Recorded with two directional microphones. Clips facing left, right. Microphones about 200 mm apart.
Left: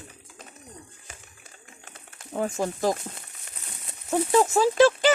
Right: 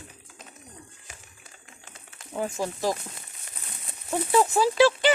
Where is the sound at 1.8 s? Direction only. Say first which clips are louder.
Left 3 dB; 55° left (ahead or behind).